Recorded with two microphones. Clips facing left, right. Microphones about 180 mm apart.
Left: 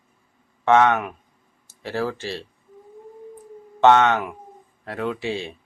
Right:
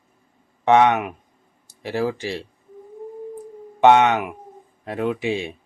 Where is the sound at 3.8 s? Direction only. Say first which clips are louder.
Right 1 dB; 15° right (ahead or behind).